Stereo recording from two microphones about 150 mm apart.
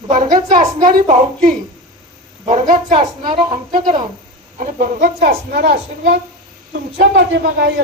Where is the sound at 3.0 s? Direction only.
30° right (ahead or behind).